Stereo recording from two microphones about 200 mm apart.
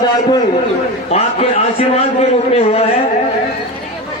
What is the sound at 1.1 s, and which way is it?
A man's voice, 30° left (ahead or behind).